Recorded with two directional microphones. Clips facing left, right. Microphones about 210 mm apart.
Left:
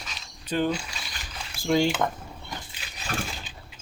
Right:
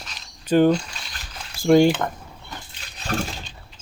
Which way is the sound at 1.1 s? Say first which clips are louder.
Even; centre (ahead or behind).